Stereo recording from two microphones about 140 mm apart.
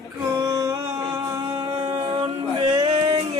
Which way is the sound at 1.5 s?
30° right (ahead or behind).